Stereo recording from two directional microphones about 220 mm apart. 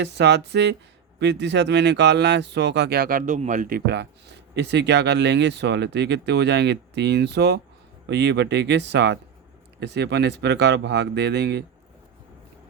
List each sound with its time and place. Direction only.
0.0 s speech: 50° right (ahead or behind)